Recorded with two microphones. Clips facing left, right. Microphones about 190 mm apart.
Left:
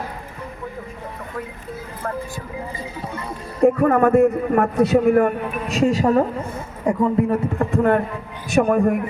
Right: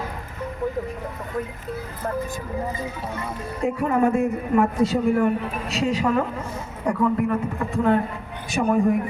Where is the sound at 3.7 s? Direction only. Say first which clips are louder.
Left 1 dB; 60° left (ahead or behind); by 6.5 s 40° left (ahead or behind).